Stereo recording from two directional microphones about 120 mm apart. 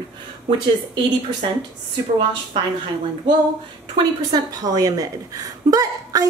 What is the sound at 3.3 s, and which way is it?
A woman's voice, 35° right (ahead or behind).